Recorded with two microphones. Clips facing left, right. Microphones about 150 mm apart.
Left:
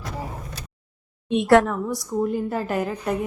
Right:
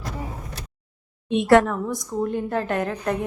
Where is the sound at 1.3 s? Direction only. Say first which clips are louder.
Even; centre (ahead or behind).